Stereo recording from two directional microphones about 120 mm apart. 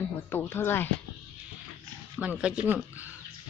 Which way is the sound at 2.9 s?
15° right (ahead or behind).